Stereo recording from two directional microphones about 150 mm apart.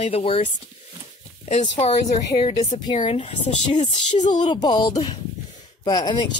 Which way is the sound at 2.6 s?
50° left (ahead or behind).